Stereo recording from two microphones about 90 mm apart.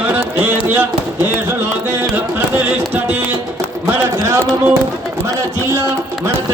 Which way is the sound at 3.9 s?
30° right (ahead or behind).